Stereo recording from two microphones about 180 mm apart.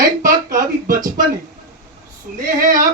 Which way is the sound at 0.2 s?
50° right (ahead or behind).